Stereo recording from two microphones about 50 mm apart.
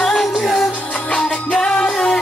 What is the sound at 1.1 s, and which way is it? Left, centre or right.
Music, centre.